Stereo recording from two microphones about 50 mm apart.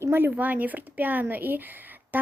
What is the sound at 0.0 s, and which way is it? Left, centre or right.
Speech, right.